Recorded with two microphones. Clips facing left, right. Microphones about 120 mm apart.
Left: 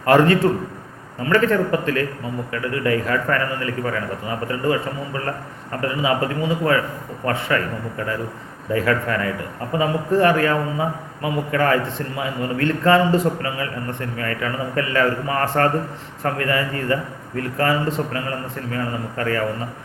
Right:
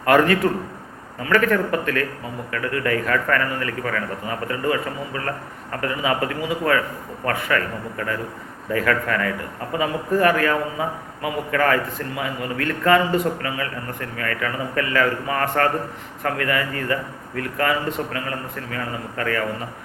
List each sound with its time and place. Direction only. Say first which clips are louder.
0.0 s a man's voice: left 2 dB; 30° left (ahead or behind)